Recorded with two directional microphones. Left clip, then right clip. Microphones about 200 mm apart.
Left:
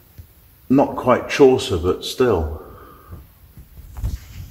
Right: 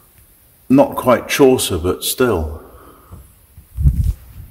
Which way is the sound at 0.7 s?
60° right (ahead or behind).